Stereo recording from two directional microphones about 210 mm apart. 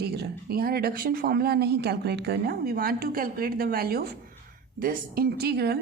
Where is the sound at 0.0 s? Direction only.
50° right (ahead or behind).